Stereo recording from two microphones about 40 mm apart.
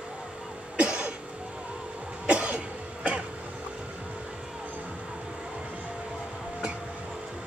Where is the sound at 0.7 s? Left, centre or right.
Right.